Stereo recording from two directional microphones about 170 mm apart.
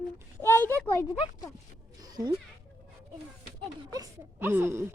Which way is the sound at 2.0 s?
25° right (ahead or behind).